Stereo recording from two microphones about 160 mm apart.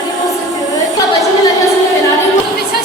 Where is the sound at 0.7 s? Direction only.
20° left (ahead or behind).